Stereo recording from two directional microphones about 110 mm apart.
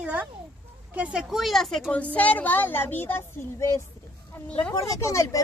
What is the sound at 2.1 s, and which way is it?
A woman's voice, 15° left (ahead or behind).